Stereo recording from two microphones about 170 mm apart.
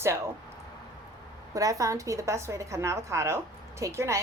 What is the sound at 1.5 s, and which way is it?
A woman's voice, 20° right (ahead or behind).